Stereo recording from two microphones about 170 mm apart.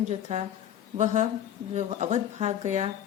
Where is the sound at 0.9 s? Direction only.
45° right (ahead or behind).